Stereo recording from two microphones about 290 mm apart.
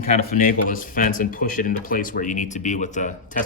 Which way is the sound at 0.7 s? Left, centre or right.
Left.